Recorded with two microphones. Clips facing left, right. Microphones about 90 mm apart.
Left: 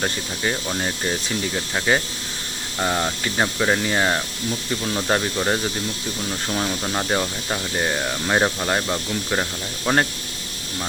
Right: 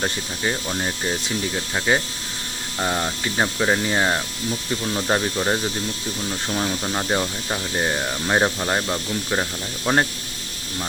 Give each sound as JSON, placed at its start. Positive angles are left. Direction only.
{"t": 0.0, "sound": "speech", "side_deg": 0}